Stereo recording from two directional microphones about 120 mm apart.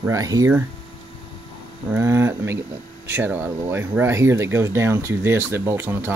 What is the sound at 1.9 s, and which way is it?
Speech, 20° right (ahead or behind).